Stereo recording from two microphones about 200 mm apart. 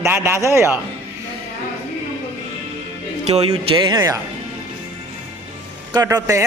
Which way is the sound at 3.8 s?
20° right (ahead or behind).